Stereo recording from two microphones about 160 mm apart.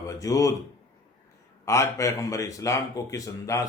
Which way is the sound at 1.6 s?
20° left (ahead or behind).